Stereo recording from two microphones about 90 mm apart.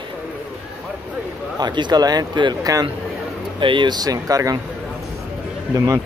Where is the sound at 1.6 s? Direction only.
55° right (ahead or behind).